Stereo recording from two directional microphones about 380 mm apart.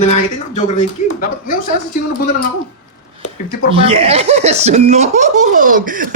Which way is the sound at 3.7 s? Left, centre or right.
Centre.